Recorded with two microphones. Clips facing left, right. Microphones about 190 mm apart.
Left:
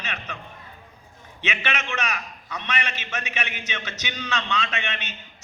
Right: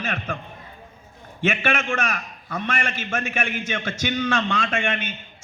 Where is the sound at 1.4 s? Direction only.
50° right (ahead or behind).